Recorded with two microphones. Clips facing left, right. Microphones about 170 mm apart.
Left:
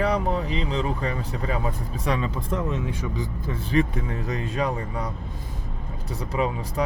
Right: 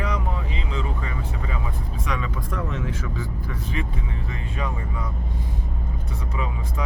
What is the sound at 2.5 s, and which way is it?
Speech, 20° left (ahead or behind).